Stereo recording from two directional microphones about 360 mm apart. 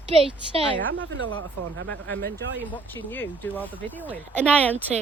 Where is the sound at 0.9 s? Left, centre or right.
Right.